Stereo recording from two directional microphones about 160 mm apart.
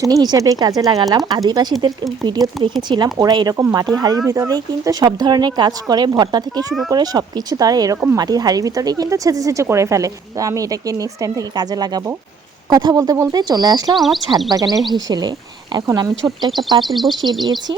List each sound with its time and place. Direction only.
0.0 s speech: 25° right (ahead or behind)
13.9 s speech: centre (ahead or behind)
14.5 s speech: 25° right (ahead or behind)
16.8 s speech: centre (ahead or behind)